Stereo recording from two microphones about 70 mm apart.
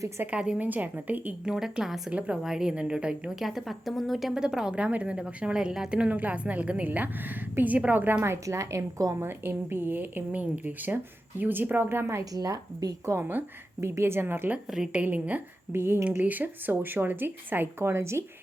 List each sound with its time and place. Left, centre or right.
0.2 s a woman's voice: centre
0.6 s speech: right
1.5 s a woman's voice: centre; by 9.1 s right
9.2 s speech: right
12.2 s a woman's voice: right
13.1 s a woman's voice: right
14.7 s a woman's voice: centre
15.0 s speech: right
15.7 s a woman's voice: right
16.2 s speech: right